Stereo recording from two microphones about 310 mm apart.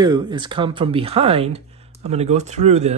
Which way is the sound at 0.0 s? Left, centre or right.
Centre.